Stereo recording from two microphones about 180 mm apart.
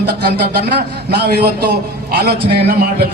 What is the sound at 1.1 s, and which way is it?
A man's voice, 60° right (ahead or behind).